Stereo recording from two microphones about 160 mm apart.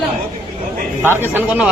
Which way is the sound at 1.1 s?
15° right (ahead or behind).